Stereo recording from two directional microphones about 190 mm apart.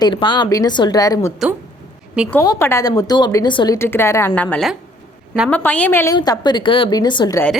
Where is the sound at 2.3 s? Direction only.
15° left (ahead or behind).